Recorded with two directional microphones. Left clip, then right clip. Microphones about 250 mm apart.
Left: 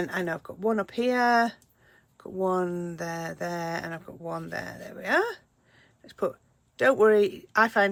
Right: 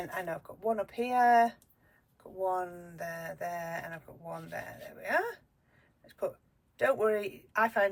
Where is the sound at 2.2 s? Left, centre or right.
Left.